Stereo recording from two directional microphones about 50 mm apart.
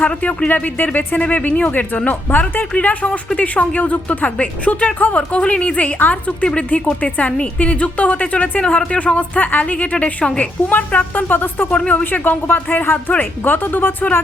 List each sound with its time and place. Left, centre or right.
0.0 s speech: left
10.7 s speech: left
11.7 s speech: left
12.1 s speech: left